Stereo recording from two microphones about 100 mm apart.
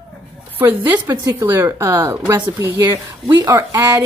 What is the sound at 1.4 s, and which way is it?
Speech, 25° right (ahead or behind).